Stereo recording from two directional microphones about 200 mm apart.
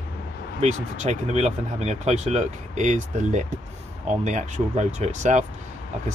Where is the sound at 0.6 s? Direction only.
35° right (ahead or behind).